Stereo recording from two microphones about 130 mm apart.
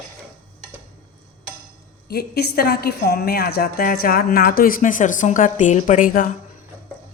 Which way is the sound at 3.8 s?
90° left.